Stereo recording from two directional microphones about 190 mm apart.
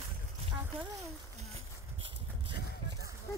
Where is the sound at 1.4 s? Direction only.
30° right (ahead or behind).